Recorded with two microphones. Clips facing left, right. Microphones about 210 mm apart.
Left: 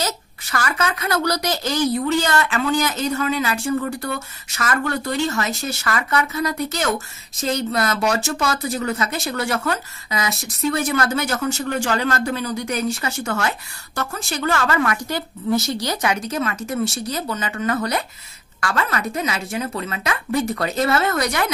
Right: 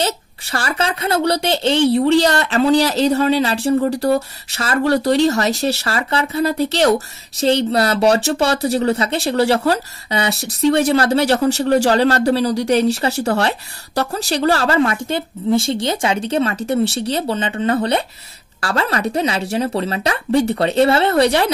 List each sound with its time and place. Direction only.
0.0 s a woman's voice: 30° right (ahead or behind)